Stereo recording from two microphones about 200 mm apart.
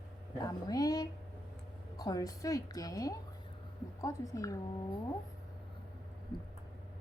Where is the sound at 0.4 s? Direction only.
20° left (ahead or behind).